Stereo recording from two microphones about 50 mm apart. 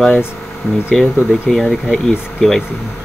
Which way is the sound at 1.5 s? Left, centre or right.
Centre.